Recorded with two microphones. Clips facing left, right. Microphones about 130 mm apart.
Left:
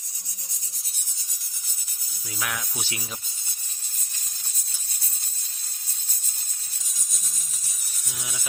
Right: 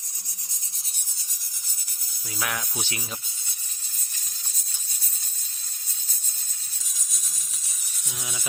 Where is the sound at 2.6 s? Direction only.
15° right (ahead or behind).